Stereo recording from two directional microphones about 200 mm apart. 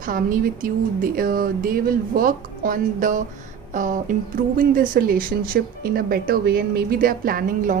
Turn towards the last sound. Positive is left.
turn(degrees=-45)  # may be behind; listen again after turning